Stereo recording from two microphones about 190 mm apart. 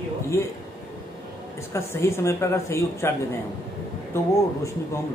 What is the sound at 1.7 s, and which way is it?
A man's voice, 15° left (ahead or behind).